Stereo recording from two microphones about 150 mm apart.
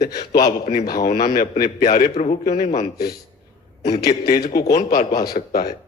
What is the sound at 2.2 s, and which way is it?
Speech, 55° left (ahead or behind).